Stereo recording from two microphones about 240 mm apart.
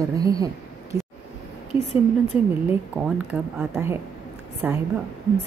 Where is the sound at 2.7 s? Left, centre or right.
Centre.